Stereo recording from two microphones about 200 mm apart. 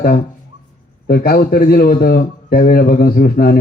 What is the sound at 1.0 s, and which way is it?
A man's voice, 50° left (ahead or behind).